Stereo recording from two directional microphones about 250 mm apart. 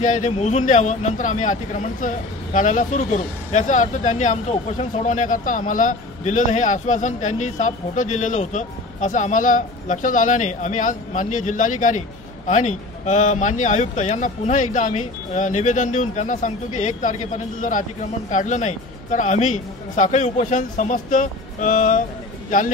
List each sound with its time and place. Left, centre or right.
0.0 s a man's voice: left